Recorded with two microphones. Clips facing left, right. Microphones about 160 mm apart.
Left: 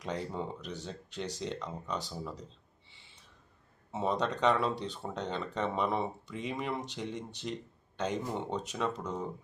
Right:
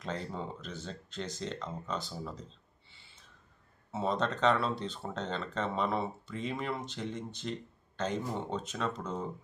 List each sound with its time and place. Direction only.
0.0 s speech: 15° left (ahead or behind)
3.9 s speech: 10° left (ahead or behind)